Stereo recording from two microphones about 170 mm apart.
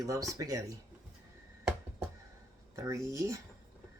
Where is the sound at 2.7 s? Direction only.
20° right (ahead or behind).